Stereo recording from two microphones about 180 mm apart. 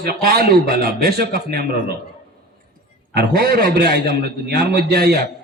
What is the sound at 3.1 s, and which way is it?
A man's voice, 60° right (ahead or behind).